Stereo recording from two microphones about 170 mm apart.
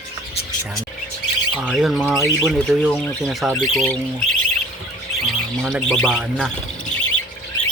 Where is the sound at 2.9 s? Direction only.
10° left (ahead or behind).